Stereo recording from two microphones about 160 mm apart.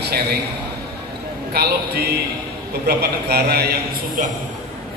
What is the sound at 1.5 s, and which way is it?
A man's voice, 85° right.